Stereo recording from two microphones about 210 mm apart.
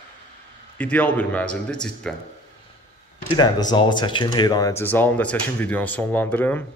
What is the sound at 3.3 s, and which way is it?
A man's voice, 20° left (ahead or behind).